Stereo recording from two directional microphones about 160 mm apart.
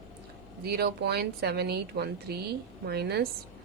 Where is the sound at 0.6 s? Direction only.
80° right.